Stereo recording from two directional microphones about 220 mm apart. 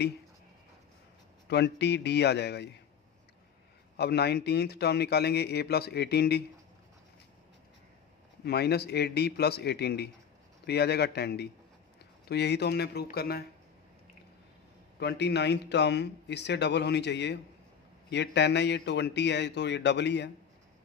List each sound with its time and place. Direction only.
1.5 s speech: 50° left (ahead or behind)
3.9 s speech: 50° left (ahead or behind)
8.5 s speech: 45° left (ahead or behind)
15.0 s speech: 50° left (ahead or behind)